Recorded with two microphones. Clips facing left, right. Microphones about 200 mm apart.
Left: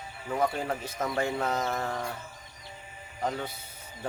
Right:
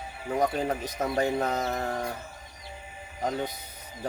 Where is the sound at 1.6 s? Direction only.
35° right (ahead or behind).